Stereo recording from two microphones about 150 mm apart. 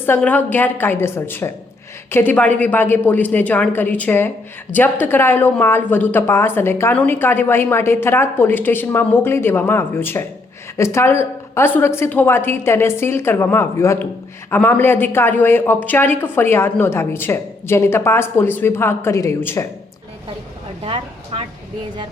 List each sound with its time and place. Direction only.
0.0 s speech: 10° left (ahead or behind)
20.8 s speech: 35° right (ahead or behind)